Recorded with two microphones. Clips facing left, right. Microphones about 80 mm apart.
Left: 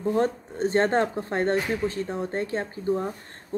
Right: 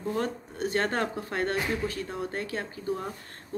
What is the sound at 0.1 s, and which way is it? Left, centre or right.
Speech, left.